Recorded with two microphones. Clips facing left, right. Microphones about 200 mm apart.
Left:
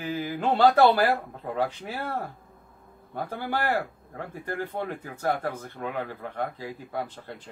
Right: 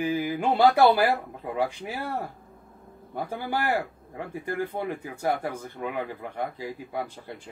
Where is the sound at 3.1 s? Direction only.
15° right (ahead or behind).